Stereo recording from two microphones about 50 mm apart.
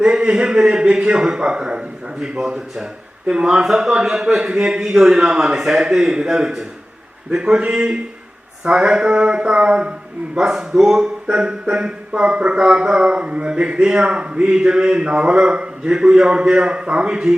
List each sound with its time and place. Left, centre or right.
0.0 s a man's voice: centre